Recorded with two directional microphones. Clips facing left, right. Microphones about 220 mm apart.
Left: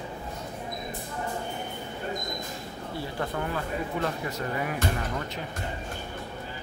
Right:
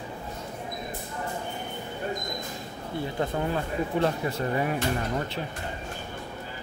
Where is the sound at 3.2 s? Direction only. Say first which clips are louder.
Right 3 dB; 25° right (ahead or behind).